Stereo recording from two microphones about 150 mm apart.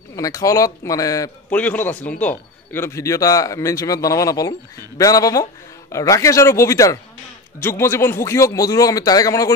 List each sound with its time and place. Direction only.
0.1 s a man's voice: 20° left (ahead or behind)
1.5 s a man's voice: 10° left (ahead or behind)